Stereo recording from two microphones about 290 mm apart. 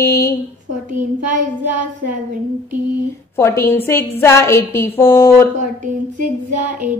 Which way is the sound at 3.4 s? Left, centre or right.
Centre.